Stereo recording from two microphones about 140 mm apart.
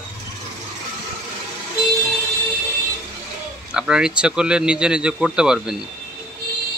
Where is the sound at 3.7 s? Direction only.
5° right (ahead or behind).